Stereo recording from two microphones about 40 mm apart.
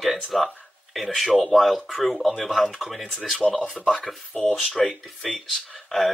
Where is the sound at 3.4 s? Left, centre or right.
Left.